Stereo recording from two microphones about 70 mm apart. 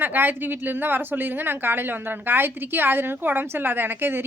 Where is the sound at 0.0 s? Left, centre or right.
Right.